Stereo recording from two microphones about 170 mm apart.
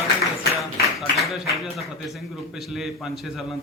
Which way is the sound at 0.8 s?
Centre (ahead or behind).